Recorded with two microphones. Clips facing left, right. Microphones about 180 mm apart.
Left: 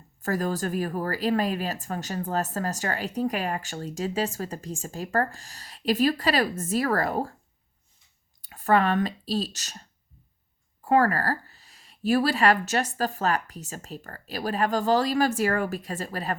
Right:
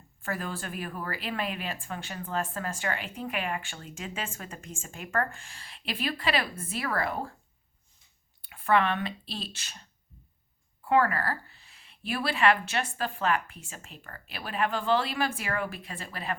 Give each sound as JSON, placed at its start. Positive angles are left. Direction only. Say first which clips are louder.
{"t": 0.2, "sound": "speech", "louder": "left 8 dB", "side_deg": 40}
{"t": 8.4, "sound": "speech", "louder": "left 3 dB", "side_deg": 40}
{"t": 10.8, "sound": "speech", "louder": "left 3 dB", "side_deg": 40}